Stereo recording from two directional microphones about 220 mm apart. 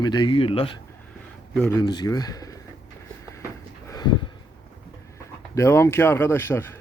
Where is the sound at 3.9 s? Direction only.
20° left (ahead or behind).